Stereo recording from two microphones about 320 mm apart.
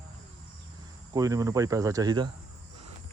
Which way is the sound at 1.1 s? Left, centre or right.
Centre.